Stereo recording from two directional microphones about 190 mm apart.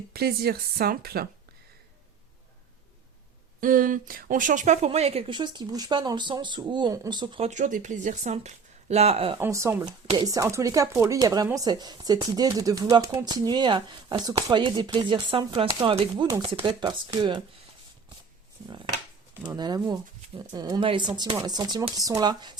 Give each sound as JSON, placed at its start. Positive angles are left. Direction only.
{"t": 0.1, "sound": "speech", "side_deg": -55}
{"t": 3.6, "sound": "speech", "side_deg": -45}
{"t": 9.4, "sound": "speech", "side_deg": -15}
{"t": 19.5, "sound": "speech", "side_deg": -20}